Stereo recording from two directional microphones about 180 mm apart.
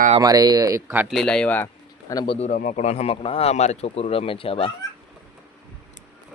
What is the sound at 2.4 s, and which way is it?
Speech, 45° left (ahead or behind).